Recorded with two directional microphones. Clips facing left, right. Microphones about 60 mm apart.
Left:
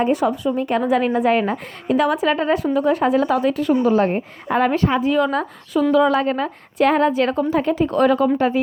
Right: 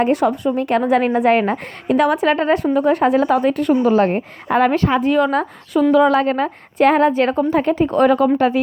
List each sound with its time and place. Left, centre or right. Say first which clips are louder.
0.0 s a woman's voice: right 2 dB; right
0.8 s a woman's voice: right 2 dB; right
8.4 s speech: right 2 dB; right